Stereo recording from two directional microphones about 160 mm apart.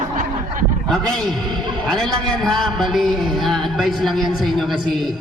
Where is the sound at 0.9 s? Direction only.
5° left (ahead or behind).